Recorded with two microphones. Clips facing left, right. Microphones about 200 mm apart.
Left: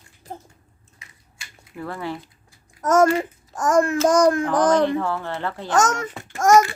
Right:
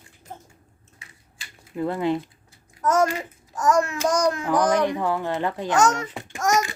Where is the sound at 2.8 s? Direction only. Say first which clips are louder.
Left 4 dB; 45° left (ahead or behind).